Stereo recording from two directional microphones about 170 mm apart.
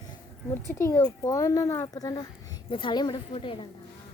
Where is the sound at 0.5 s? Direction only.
15° left (ahead or behind); by 3.7 s 30° left (ahead or behind).